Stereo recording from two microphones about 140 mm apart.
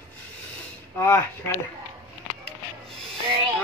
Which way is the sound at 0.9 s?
20° left (ahead or behind).